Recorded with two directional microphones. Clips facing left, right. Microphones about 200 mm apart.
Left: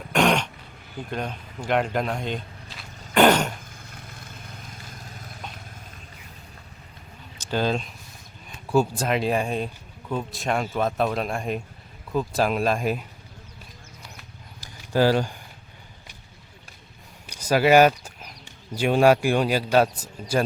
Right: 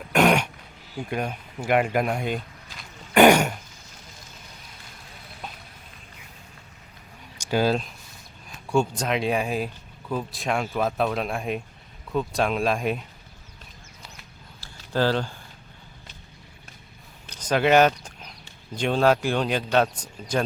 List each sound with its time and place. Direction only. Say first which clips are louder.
0.1 s throat clearing: right 2 dB; 10° right (ahead or behind)
1.1 s speech: right 2 dB; 10° right (ahead or behind)
3.2 s throat clearing: right 3 dB; 10° right (ahead or behind)
3.7 s vehicle: left 5 dB; 55° left (ahead or behind)
5.1 s vehicle: left 4 dB; 45° left (ahead or behind)
7.3 s speech: right 2 dB; 10° right (ahead or behind)
14.6 s a sound: left 3 dB; 10° left (ahead or behind)
17.2 s speech: left 2 dB; 10° left (ahead or behind)